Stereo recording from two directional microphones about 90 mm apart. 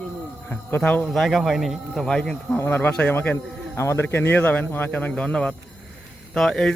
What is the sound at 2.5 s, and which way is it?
Speech, 20° left (ahead or behind).